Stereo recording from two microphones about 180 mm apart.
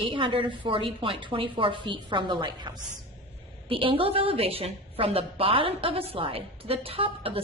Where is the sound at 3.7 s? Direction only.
30° right (ahead or behind).